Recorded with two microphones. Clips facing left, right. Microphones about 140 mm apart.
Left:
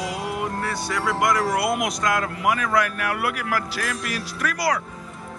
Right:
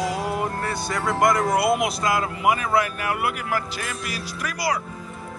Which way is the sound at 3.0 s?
70° left (ahead or behind).